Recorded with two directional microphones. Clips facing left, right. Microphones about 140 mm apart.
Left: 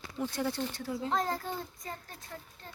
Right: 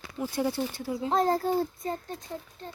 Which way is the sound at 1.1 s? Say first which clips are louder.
Right 10 dB; 35° right (ahead or behind).